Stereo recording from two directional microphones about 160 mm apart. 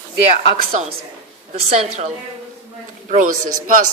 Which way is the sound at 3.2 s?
55° right (ahead or behind).